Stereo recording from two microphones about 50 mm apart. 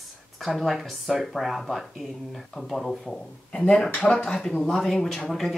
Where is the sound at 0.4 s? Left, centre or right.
Centre.